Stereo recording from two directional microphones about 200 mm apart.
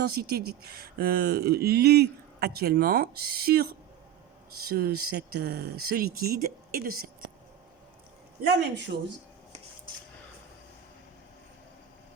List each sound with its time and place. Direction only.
0.0 s speech: 50° right (ahead or behind)
8.9 s speech: 55° right (ahead or behind)